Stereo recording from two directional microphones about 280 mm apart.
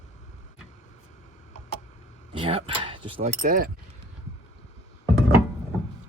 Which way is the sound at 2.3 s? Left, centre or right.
Centre.